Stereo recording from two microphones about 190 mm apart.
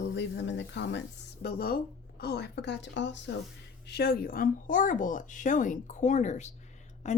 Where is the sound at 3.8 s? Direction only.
55° left (ahead or behind).